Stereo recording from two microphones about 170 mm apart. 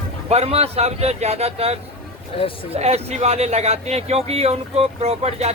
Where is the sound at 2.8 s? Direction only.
40° right (ahead or behind).